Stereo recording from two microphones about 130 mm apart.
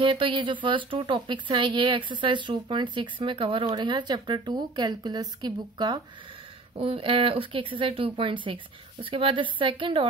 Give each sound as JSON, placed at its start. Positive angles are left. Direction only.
{"t": 0.0, "sound": "speech", "side_deg": -40}
{"t": 6.7, "sound": "speech", "side_deg": -45}